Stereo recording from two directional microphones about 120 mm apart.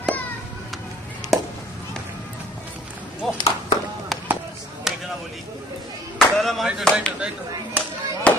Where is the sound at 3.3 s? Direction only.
35° left (ahead or behind).